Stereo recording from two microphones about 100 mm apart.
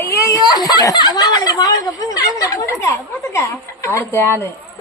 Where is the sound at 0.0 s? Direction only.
35° left (ahead or behind).